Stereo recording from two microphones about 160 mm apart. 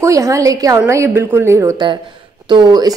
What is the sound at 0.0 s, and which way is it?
A woman's voice, 20° right (ahead or behind).